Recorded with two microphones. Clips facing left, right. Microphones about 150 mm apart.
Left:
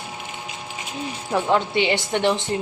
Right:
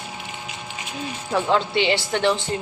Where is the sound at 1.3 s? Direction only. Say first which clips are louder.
Even; 15° left (ahead or behind).